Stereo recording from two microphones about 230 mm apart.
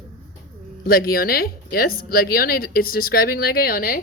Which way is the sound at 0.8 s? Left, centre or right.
Left.